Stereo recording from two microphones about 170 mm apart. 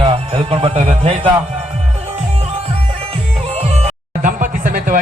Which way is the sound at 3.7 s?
45° right (ahead or behind).